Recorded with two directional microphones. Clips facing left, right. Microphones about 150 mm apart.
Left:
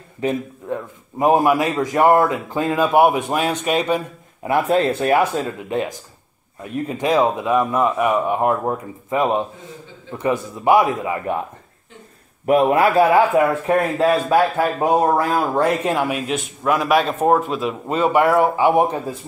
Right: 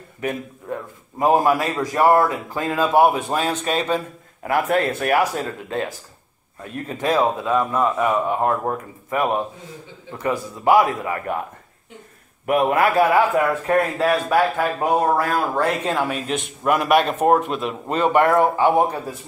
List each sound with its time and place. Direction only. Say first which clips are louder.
0.2 s a man's voice: left 4 dB; 20° left (ahead or behind)
12.4 s speech: left 3 dB; 30° left (ahead or behind); by 16.2 s 10° left (ahead or behind)
16.3 s a man's voice: left 1 dB; centre (ahead or behind)